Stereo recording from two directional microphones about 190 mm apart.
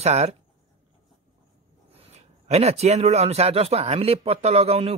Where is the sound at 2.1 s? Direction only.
35° right (ahead or behind).